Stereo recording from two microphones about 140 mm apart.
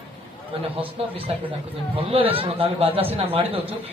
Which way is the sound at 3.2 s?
45° right (ahead or behind).